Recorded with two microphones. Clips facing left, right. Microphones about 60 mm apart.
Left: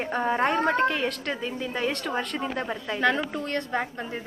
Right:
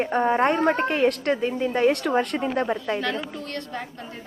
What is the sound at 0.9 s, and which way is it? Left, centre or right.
Speech, right.